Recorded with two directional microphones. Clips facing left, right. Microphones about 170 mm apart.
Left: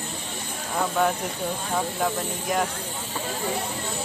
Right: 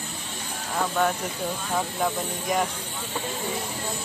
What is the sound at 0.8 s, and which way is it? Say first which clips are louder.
Speech: left 1 dB; centre (ahead or behind).